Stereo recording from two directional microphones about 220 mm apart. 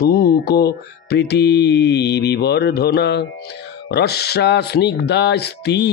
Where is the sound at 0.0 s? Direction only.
45° left (ahead or behind).